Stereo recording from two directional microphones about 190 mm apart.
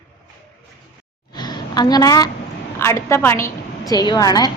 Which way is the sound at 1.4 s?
20° left (ahead or behind).